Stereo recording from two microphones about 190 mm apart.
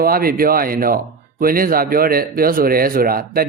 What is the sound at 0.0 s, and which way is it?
Speech, 50° right (ahead or behind).